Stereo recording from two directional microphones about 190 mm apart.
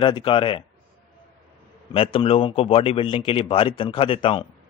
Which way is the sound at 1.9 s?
30° left (ahead or behind).